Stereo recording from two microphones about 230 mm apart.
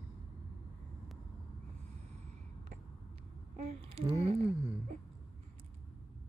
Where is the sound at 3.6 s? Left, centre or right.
Right.